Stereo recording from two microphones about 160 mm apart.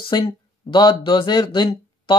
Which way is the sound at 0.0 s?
30° left (ahead or behind).